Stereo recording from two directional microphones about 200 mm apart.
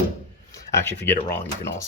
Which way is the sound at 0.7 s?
10° left (ahead or behind).